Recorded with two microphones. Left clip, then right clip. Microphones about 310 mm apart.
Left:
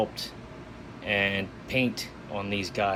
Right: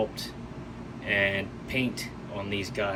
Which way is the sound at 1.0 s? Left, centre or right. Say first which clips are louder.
Even; centre.